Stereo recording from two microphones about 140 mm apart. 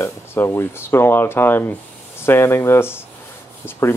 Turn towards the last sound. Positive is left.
turn(degrees=15)  # may be behind; listen again after turning